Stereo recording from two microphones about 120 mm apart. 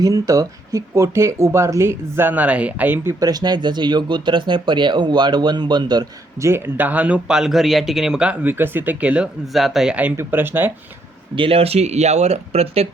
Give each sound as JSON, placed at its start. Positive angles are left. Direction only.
{"t": 0.0, "sound": "speech", "side_deg": -30}
{"t": 3.2, "sound": "speech", "side_deg": -35}
{"t": 6.4, "sound": "speech", "side_deg": -20}
{"t": 11.3, "sound": "speech", "side_deg": -50}